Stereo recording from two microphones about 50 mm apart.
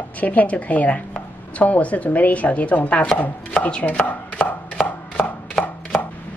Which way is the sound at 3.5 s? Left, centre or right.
Left.